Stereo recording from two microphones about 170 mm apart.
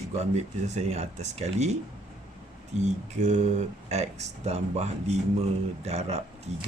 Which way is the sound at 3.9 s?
40° right (ahead or behind).